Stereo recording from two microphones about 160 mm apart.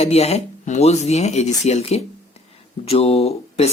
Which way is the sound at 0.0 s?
40° left (ahead or behind).